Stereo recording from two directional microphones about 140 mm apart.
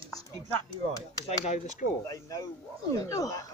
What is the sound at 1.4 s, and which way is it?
Speech, 55° left (ahead or behind).